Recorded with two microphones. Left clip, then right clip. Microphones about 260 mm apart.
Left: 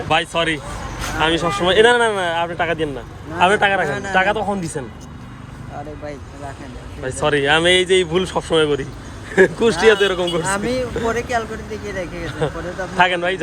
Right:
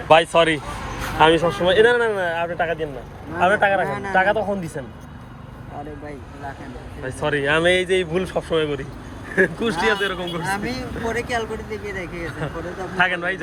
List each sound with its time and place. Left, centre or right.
0.1 s speech: centre
7.0 s speech: centre